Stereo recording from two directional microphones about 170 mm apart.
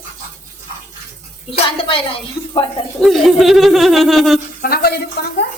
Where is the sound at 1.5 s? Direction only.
35° left (ahead or behind).